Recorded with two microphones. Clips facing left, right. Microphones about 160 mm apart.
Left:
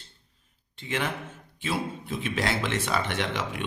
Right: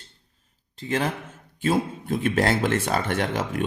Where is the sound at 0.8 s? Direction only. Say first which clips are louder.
Right 5 dB; 40° right (ahead or behind).